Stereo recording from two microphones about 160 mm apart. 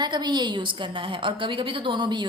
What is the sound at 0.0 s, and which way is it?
A woman's voice, 25° right (ahead or behind).